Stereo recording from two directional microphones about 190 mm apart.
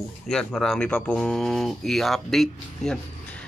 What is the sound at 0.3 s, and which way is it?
Speech, centre (ahead or behind).